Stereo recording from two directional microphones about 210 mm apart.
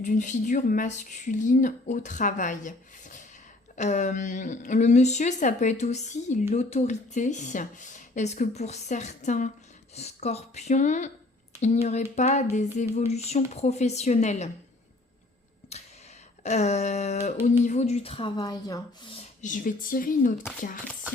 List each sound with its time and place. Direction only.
0.0 s speech: 35° left (ahead or behind)
15.7 s a sound: 30° left (ahead or behind)
16.4 s a woman's voice: 35° left (ahead or behind)
19.4 s speech: 40° left (ahead or behind)